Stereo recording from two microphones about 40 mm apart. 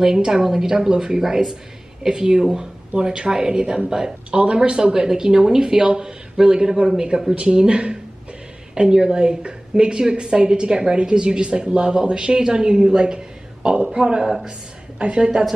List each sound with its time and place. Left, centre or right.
0.0 s a woman's voice: centre
14.2 s speech: centre
15.0 s a woman's voice: right